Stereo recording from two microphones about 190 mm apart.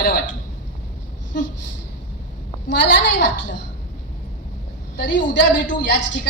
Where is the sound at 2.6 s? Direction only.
70° left (ahead or behind).